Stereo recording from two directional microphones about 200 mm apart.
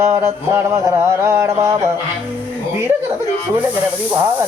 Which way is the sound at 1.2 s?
10° right (ahead or behind).